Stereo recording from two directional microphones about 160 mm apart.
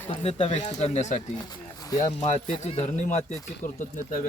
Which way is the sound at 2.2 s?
50° left (ahead or behind).